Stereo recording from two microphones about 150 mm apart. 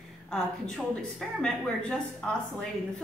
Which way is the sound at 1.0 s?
5° left (ahead or behind).